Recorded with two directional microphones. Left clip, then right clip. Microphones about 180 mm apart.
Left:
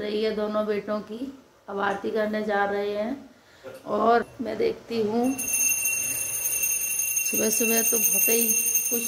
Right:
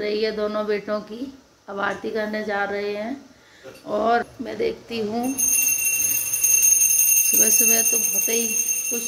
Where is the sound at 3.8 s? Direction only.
5° left (ahead or behind).